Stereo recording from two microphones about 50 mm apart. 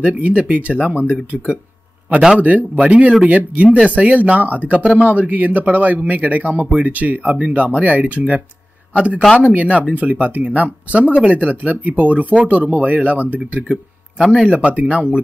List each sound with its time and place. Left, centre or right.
0.0 s speech: right
14.7 s speech: right